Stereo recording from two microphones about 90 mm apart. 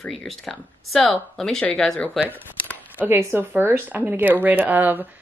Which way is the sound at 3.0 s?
25° right (ahead or behind).